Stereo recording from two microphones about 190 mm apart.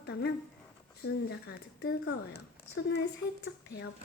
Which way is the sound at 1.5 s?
65° left (ahead or behind).